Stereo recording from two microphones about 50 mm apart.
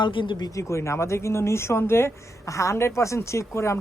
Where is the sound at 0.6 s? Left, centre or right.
Left.